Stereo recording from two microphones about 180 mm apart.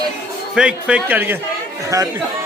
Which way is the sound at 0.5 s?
5° right (ahead or behind).